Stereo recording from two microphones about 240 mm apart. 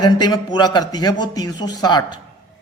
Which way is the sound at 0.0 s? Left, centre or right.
Centre.